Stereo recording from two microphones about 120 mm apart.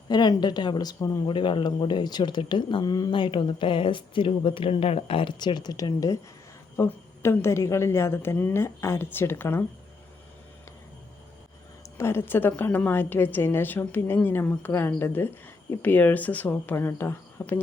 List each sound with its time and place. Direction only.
0.1 s speech: 35° left (ahead or behind)
1.2 s a woman's voice: 45° left (ahead or behind); by 9.6 s 20° left (ahead or behind)
11.9 s a woman's voice: 20° left (ahead or behind)